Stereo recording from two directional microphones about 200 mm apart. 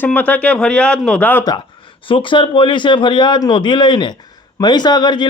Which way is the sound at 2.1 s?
25° left (ahead or behind).